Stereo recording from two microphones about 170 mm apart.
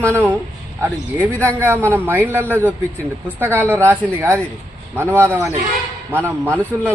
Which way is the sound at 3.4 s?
10° right (ahead or behind).